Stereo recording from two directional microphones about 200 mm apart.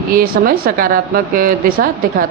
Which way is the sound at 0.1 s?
45° right (ahead or behind).